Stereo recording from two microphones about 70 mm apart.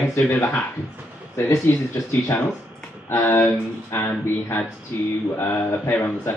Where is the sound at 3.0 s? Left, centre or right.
Left.